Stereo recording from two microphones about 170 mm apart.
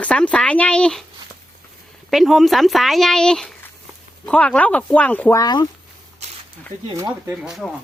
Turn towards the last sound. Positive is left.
turn(degrees=0)  # may be behind; listen again after turning